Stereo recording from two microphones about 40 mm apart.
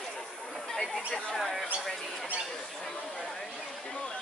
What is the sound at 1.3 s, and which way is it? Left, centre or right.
Speech, centre.